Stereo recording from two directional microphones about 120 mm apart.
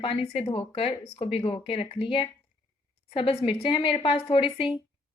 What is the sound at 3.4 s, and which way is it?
A woman's voice, 50° left (ahead or behind).